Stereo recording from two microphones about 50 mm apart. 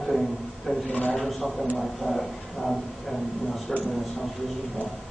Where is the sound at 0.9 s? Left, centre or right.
Left.